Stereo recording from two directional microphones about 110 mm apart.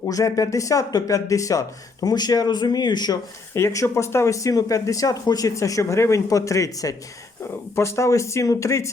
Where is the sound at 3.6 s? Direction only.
25° left (ahead or behind).